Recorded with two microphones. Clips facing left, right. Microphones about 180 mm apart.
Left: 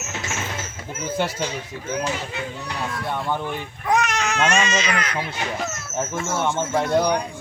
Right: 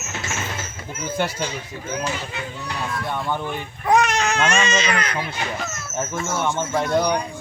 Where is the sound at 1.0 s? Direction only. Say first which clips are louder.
Even; centre (ahead or behind).